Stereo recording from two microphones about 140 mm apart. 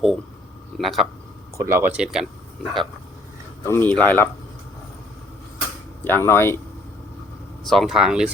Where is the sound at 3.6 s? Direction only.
15° left (ahead or behind).